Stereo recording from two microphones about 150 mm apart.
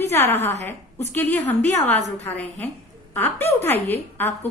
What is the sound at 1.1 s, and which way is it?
Speech, 10° left (ahead or behind).